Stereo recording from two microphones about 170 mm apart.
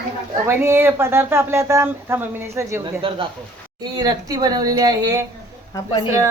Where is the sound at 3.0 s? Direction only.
30° right (ahead or behind).